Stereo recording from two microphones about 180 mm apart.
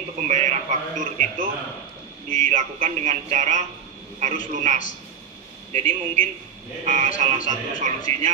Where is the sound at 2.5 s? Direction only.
40° right (ahead or behind).